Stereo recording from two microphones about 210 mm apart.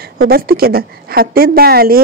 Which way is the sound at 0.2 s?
45° right (ahead or behind).